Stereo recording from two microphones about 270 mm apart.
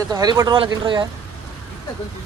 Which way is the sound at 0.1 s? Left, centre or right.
Centre.